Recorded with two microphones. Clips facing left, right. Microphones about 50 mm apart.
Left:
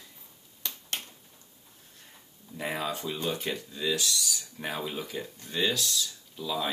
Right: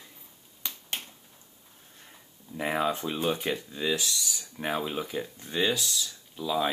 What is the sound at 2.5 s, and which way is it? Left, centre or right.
Speech, right.